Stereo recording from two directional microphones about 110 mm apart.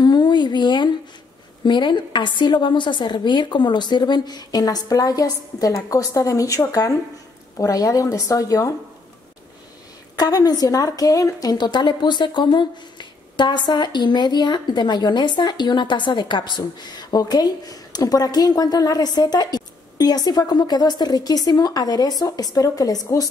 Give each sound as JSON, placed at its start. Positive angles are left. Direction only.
{"t": 0.0, "sound": "a sound", "side_deg": 40}
{"t": 1.6, "sound": "a woman's voice", "side_deg": 45}
{"t": 10.1, "sound": "a woman's voice", "side_deg": 35}